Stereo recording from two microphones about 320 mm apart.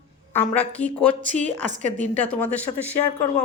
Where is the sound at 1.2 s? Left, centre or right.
Right.